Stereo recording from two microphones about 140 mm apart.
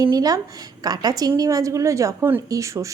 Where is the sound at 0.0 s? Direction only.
25° right (ahead or behind).